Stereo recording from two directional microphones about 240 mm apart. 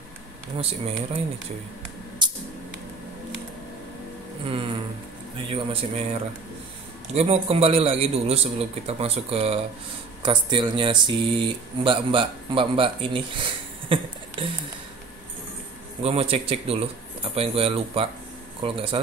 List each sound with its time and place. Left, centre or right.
0.6 s speech: right
2.2 s a sound: centre
5.5 s speech: right
7.2 s speech: right
16.0 s speech: right